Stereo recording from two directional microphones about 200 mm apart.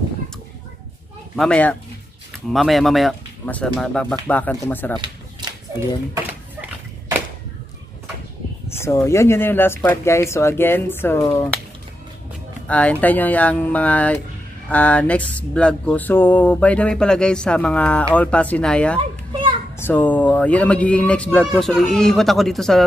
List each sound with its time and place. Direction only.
1.3 s speech: 5° left (ahead or behind)
5.0 s a sound: 20° right (ahead or behind)
8.6 s speech: 15° left (ahead or behind)
12.6 s speech: 5° left (ahead or behind)
18.9 s children playing: 25° right (ahead or behind)
19.8 s speech: 10° left (ahead or behind)